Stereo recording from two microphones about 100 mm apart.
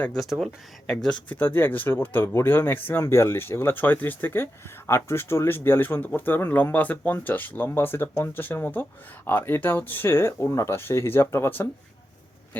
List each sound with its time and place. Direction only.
0.2 s speech: centre (ahead or behind)
1.3 s speech: 20° left (ahead or behind)